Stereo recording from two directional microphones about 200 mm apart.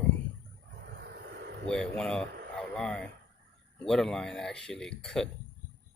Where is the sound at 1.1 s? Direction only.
55° right (ahead or behind).